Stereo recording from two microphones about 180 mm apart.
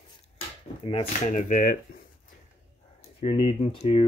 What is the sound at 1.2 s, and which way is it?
Speech, 45° left (ahead or behind).